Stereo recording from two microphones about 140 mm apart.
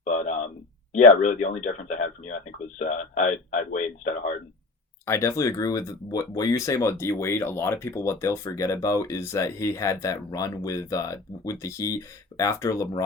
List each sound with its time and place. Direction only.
0.0 s a sound: 60° left (ahead or behind)
0.9 s speech: 55° left (ahead or behind)
5.0 s speech: 20° left (ahead or behind)